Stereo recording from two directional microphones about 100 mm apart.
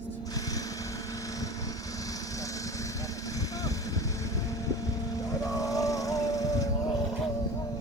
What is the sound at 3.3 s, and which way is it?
Vehicle, 35° left (ahead or behind).